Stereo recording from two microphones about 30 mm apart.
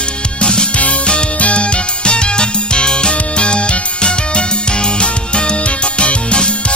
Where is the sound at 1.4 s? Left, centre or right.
Left.